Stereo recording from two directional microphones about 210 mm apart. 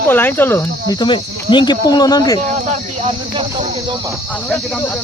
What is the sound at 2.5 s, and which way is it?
Speech, 30° right (ahead or behind).